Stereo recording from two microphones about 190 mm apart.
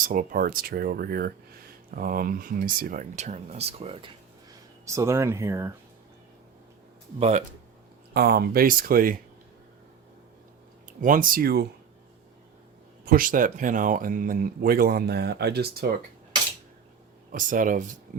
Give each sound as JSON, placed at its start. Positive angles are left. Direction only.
{"t": 0.0, "sound": "speech", "side_deg": -45}
{"t": 4.9, "sound": "speech", "side_deg": -15}
{"t": 7.2, "sound": "speech", "side_deg": -35}
{"t": 8.1, "sound": "speech", "side_deg": -55}
{"t": 11.0, "sound": "speech", "side_deg": -45}
{"t": 13.1, "sound": "speech", "side_deg": -45}
{"t": 17.3, "sound": "speech", "side_deg": -45}